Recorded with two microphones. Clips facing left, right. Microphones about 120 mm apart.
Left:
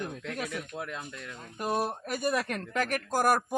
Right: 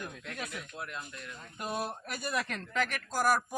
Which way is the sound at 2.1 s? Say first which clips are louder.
Left 6 dB; 50° left (ahead or behind).